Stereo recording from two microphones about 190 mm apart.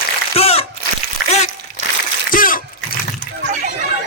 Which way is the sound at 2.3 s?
45° left (ahead or behind).